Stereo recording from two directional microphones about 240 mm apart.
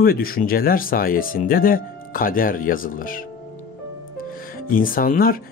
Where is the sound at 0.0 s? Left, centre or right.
Left.